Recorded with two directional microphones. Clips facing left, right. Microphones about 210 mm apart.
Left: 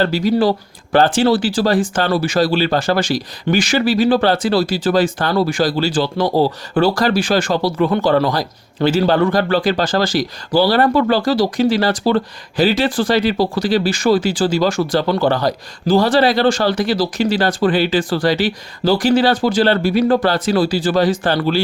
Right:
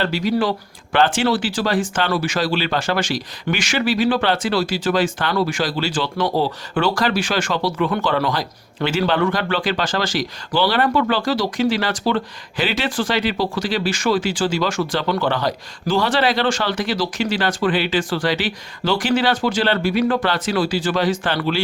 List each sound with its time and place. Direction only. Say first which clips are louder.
0.0 s speech: left 5 dB; 40° left (ahead or behind)